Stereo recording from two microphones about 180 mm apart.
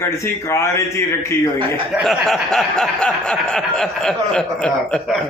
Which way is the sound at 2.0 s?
Centre (ahead or behind).